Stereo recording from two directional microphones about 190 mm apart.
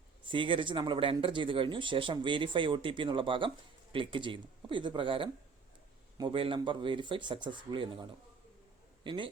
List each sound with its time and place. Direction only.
0.3 s speech: 25° right (ahead or behind)
9.0 s speech: 25° right (ahead or behind)